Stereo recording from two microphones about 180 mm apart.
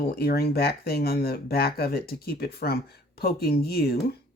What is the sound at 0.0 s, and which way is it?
Speech, 60° left (ahead or behind).